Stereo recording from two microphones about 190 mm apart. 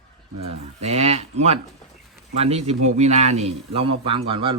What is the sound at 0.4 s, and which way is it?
A man's voice, 35° right (ahead or behind).